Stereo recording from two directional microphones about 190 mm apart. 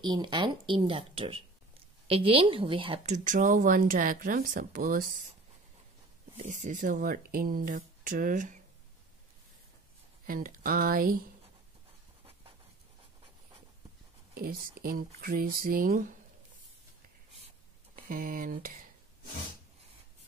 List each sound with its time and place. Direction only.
0.0 s a woman's voice: 25° right (ahead or behind)
3.3 s speech: 45° right (ahead or behind)
6.3 s speech: 40° right (ahead or behind)
10.2 s speech: 50° right (ahead or behind)
14.3 s speech: 50° right (ahead or behind)
17.9 s speech: 45° right (ahead or behind)